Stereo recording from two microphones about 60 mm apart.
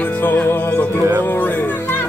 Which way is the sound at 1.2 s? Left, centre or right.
Left.